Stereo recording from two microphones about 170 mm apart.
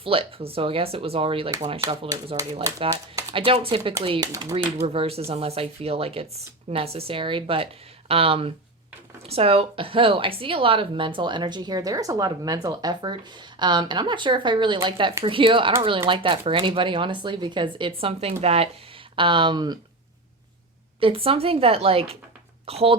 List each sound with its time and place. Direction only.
0.0 s a woman's voice: 35° right (ahead or behind)
4.2 s speech: 20° right (ahead or behind)
4.5 s a woman's voice: 35° right (ahead or behind)
21.0 s a woman's voice: 35° right (ahead or behind)